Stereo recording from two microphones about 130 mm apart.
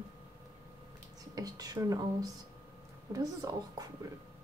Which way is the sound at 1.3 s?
30° right (ahead or behind).